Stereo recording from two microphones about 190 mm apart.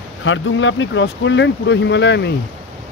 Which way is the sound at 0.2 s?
85° left.